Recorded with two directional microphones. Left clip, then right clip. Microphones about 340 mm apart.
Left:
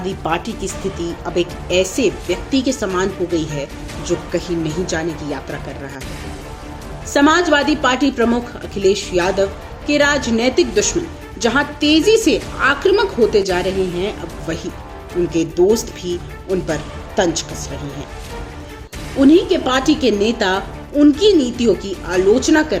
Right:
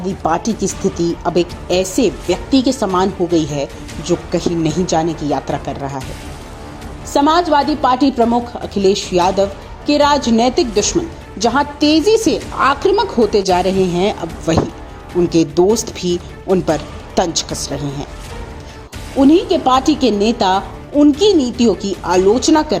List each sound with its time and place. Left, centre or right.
0.2 s a woman's voice: centre
7.1 s a woman's voice: centre
19.2 s a woman's voice: centre